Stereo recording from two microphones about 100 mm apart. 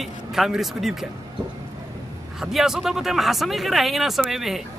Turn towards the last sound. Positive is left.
turn(degrees=-5)  # may be behind; listen again after turning